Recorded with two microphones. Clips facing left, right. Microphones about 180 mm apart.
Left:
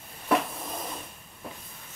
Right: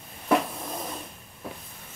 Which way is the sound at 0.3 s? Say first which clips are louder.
Right 2 dB; 5° right (ahead or behind).